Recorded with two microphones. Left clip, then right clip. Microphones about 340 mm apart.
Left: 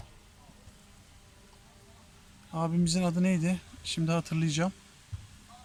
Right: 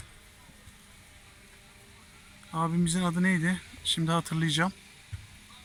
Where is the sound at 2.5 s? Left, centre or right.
Centre.